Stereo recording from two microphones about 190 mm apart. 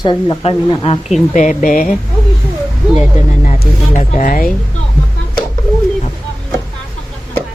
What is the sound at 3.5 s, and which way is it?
Speech, 40° left (ahead or behind).